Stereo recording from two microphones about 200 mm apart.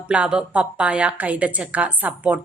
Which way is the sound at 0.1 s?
5° right (ahead or behind).